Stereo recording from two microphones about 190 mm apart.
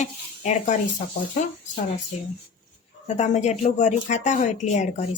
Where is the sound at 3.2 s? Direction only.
40° left (ahead or behind).